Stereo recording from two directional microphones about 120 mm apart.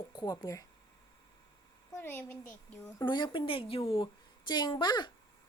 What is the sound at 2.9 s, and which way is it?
Speech, 40° left (ahead or behind).